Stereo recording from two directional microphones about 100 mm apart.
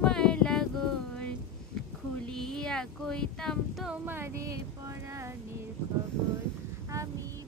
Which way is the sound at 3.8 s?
15° right (ahead or behind).